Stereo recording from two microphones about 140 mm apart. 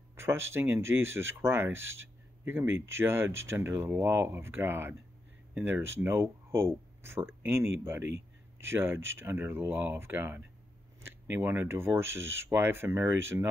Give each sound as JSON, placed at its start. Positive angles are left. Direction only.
{"t": 0.1, "sound": "speech", "side_deg": -20}